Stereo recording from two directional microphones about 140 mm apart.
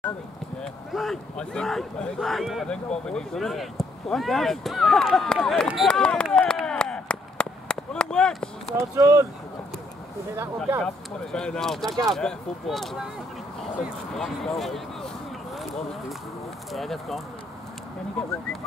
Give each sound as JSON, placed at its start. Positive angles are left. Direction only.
{"t": 0.9, "sound": "speech", "side_deg": 0}
{"t": 6.3, "sound": "chop", "side_deg": 5}
{"t": 8.7, "sound": "speech", "side_deg": -20}
{"t": 10.3, "sound": "speech", "side_deg": -20}
{"t": 11.3, "sound": "speech", "side_deg": 5}
{"t": 14.1, "sound": "speech", "side_deg": 5}
{"t": 16.7, "sound": "speech", "side_deg": 0}